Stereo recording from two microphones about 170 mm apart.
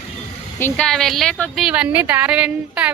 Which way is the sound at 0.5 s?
10° left (ahead or behind).